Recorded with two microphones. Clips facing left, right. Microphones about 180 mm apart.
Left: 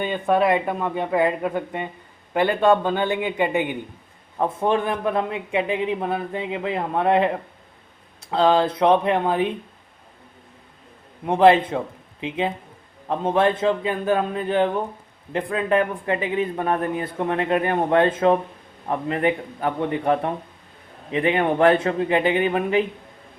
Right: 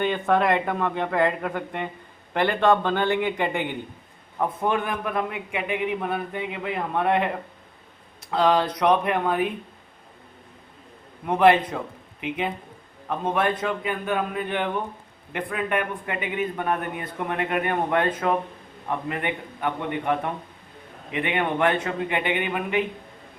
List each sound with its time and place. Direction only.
0.1 s speech: 15° left (ahead or behind)
4.4 s a man's voice: 25° left (ahead or behind)
8.3 s a man's voice: 30° left (ahead or behind)
11.3 s a man's voice: 25° left (ahead or behind)